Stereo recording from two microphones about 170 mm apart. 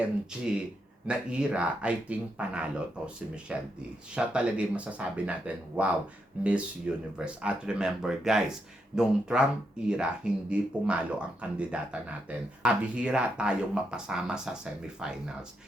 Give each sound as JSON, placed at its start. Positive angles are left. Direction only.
{"t": 0.0, "sound": "speech", "side_deg": -5}